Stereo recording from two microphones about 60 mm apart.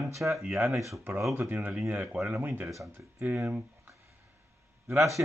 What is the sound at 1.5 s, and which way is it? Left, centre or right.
Mantra, right.